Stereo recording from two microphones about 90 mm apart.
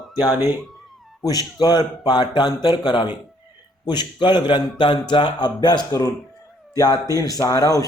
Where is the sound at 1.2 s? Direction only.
45° left (ahead or behind); by 5.5 s 65° left (ahead or behind).